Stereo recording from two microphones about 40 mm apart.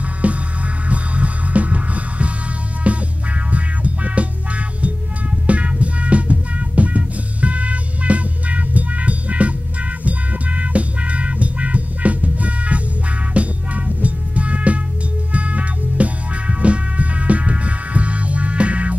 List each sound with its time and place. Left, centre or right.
0.2 s music: right